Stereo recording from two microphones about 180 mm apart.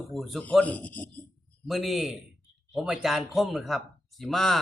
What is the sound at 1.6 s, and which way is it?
Speech, centre (ahead or behind).